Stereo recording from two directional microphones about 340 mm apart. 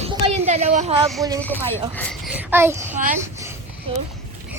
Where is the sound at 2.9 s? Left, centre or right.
Right.